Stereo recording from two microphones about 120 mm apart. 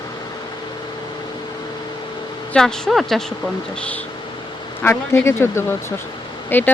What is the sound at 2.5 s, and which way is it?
Speech, 5° left (ahead or behind).